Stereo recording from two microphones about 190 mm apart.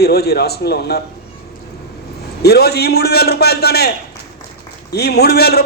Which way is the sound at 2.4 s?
55° left (ahead or behind).